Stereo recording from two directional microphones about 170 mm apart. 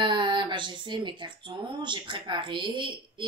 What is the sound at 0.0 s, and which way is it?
Speech, 30° right (ahead or behind).